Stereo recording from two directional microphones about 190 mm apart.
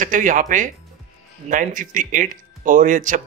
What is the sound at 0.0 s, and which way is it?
Speech, 45° right (ahead or behind).